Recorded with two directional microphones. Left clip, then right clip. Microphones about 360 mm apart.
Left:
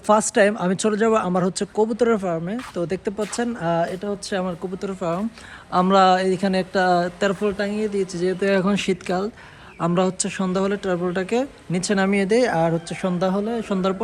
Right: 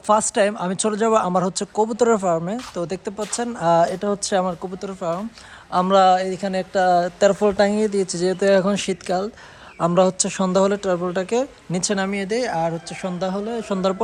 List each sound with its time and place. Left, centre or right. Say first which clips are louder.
0.1 s speech: left 1 dB; centre